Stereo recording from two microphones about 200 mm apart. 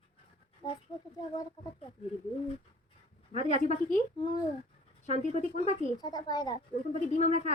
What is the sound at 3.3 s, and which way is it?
Speech, 35° left (ahead or behind).